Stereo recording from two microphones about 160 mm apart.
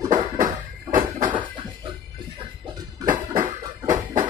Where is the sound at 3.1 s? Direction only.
55° right (ahead or behind).